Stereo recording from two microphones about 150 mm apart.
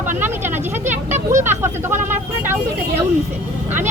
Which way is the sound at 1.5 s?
15° right (ahead or behind).